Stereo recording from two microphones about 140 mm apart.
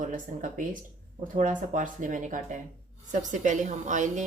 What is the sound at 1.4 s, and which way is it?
Speech, 65° right (ahead or behind).